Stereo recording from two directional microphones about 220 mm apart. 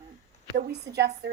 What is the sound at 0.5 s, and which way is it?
Speech, 45° right (ahead or behind).